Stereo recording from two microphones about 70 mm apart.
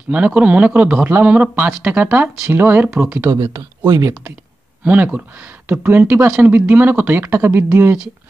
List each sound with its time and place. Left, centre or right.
0.1 s speech: centre
3.4 s speech: right
4.8 s speech: right